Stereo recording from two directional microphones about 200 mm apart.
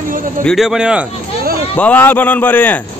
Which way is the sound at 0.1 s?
45° right (ahead or behind).